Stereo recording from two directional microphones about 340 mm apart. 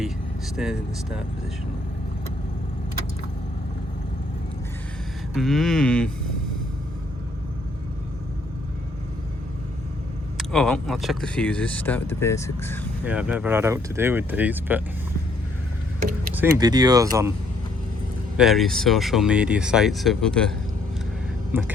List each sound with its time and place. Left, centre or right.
0.5 s speech: centre
5.3 s speech: centre
10.3 s speech: centre
13.1 s speech: centre
16.0 s vehicle: right
16.3 s speech: centre
18.3 s speech: centre
21.5 s speech: centre